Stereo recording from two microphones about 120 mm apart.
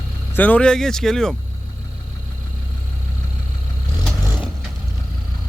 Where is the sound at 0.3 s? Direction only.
15° left (ahead or behind).